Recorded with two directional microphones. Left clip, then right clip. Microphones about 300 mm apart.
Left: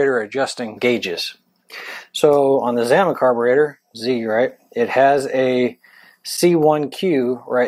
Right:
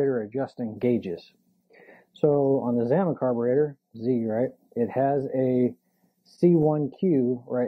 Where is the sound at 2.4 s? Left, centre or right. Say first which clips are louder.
Left 8 dB; left; by 5.7 s centre.